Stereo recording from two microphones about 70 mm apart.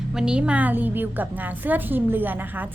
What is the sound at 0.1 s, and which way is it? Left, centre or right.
A woman's voice, centre.